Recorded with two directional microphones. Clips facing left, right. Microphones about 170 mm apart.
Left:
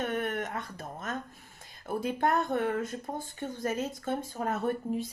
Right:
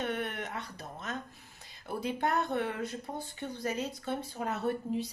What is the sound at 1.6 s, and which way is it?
Speech, 50° left (ahead or behind).